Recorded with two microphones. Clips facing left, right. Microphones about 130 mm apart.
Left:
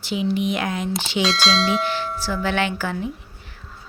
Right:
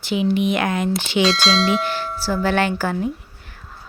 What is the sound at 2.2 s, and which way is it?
Speech, 40° right (ahead or behind).